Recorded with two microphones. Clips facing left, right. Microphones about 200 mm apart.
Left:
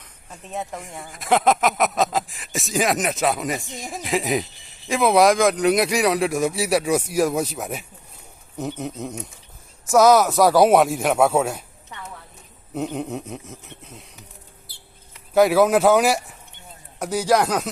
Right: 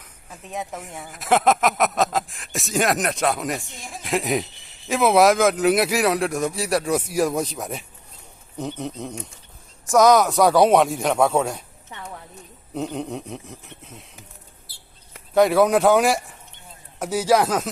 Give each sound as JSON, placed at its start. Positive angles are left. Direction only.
{"t": 0.0, "sound": "speech", "side_deg": 0}
{"t": 12.7, "sound": "speech", "side_deg": 5}
{"t": 15.4, "sound": "speech", "side_deg": 0}